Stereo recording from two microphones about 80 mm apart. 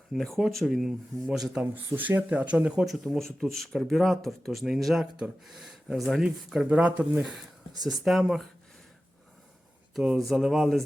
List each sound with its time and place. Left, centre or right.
0.2 s speech: centre
1.7 s speech: right
2.8 s speech: centre
6.7 s speech: centre
7.2 s speech: centre
10.2 s speech: centre